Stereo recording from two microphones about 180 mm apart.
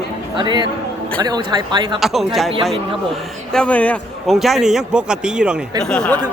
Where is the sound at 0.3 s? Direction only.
25° right (ahead or behind).